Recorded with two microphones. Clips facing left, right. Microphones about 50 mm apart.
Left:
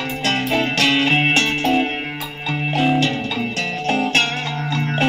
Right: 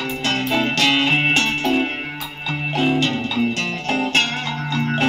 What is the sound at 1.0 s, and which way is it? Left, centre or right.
Music, centre.